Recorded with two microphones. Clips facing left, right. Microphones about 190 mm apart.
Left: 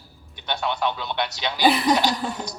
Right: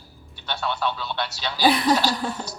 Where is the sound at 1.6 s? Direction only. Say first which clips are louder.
Even; centre (ahead or behind).